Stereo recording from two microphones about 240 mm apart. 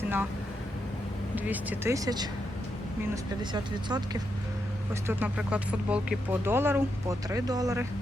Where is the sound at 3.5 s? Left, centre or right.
Centre.